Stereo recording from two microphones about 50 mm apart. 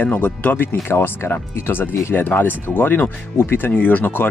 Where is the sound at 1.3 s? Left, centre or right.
Left.